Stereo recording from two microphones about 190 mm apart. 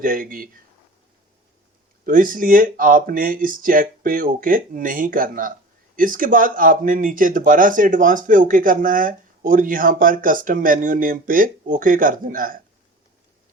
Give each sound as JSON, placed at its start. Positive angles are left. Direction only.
{"t": 0.0, "sound": "speech", "side_deg": -45}
{"t": 2.0, "sound": "speech", "side_deg": -45}